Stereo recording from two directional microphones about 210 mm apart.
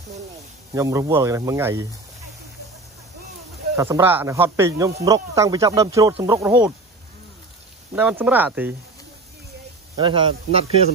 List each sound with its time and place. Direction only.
0.7 s speech: 15° right (ahead or behind)
3.7 s speech: 15° right (ahead or behind)
7.9 s speech: 5° right (ahead or behind)
9.9 s speech: 25° right (ahead or behind)